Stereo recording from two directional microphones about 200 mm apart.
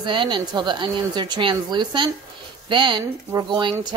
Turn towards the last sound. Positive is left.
turn(degrees=-20)  # may be behind; listen again after turning